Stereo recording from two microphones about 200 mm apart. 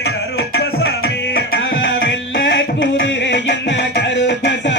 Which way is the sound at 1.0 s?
65° left (ahead or behind).